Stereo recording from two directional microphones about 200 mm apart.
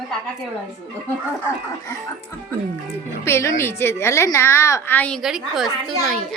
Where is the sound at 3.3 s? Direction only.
15° left (ahead or behind); by 5.7 s centre (ahead or behind).